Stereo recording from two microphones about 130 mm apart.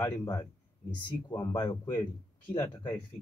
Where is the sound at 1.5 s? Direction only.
40° left (ahead or behind).